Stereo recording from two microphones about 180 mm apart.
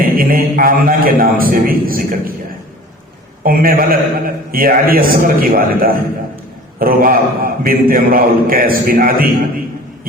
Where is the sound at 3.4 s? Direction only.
55° right (ahead or behind).